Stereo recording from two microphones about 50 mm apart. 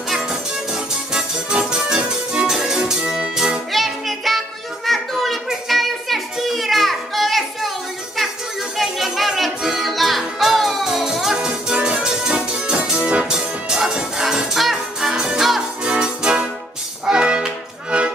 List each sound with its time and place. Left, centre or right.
0.1 s music: centre
3.7 s music: centre
4.8 s children playing: centre
5.7 s music: centre
8.7 s music: centre; by 18.1 s right